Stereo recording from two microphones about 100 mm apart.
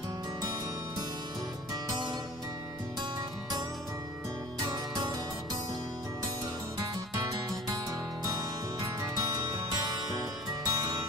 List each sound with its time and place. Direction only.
4.6 s music: 40° right (ahead or behind)
6.8 s music: 40° right (ahead or behind)